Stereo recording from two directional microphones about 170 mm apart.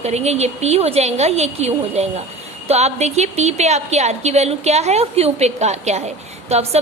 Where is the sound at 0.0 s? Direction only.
40° right (ahead or behind).